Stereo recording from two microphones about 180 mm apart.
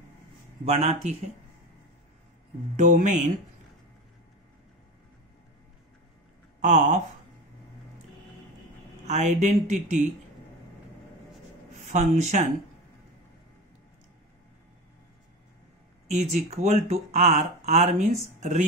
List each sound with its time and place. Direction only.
0.7 s speech: 35° right (ahead or behind)
2.9 s speech: 45° right (ahead or behind)
6.6 s speech: 45° right (ahead or behind)
9.0 s speech: 40° right (ahead or behind)
11.9 s speech: 40° right (ahead or behind)
16.1 s speech: 40° right (ahead or behind)